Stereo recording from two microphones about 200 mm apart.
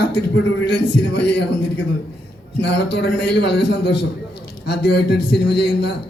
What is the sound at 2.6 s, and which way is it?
A man's voice, 60° left (ahead or behind).